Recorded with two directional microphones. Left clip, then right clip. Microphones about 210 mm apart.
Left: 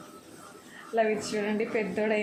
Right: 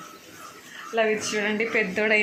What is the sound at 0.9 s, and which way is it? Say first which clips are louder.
Speech: right 3 dB; 5° right (ahead or behind).